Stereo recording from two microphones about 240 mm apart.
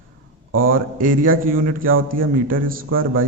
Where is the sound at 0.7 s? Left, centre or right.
Right.